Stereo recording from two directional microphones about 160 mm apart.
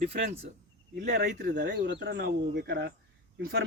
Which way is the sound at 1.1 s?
90° right.